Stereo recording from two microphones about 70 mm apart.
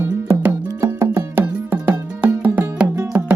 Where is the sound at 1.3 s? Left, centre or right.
Right.